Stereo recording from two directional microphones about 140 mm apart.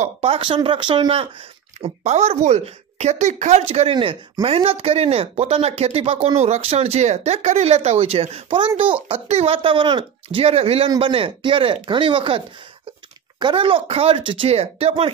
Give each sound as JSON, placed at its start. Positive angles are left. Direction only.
{"t": 0.0, "sound": "speech", "side_deg": -45}
{"t": 1.8, "sound": "speech", "side_deg": -50}